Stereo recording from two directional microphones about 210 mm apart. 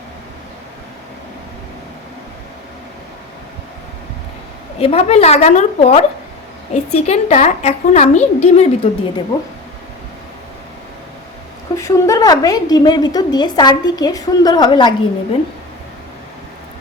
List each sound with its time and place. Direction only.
4.8 s a woman's voice: 30° left (ahead or behind)
11.8 s a woman's voice: 15° left (ahead or behind)